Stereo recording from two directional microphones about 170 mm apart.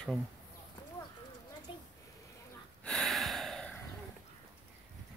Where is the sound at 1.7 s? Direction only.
30° left (ahead or behind).